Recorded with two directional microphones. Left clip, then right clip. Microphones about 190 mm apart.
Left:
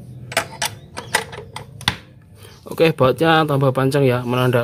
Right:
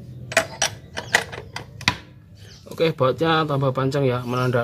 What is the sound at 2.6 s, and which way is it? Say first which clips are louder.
Speech: left 5 dB; 40° left (ahead or behind).